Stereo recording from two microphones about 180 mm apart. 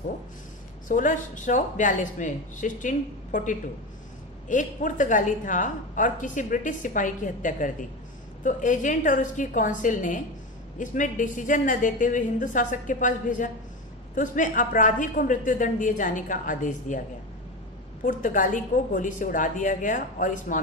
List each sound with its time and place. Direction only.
0.8 s a woman's voice: 45° left (ahead or behind)
18.0 s a woman's voice: 45° left (ahead or behind)